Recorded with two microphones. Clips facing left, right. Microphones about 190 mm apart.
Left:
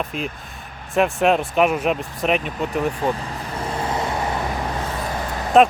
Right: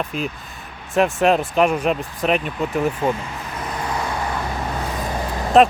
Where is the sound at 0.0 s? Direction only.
Centre (ahead or behind).